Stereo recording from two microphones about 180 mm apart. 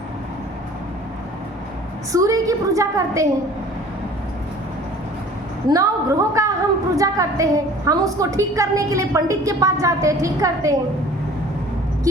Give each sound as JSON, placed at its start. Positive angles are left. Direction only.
{"t": 2.1, "sound": "a woman's voice", "side_deg": -20}
{"t": 5.6, "sound": "a woman's voice", "side_deg": -20}